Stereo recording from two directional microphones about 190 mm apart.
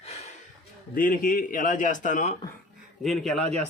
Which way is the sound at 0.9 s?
45° left (ahead or behind).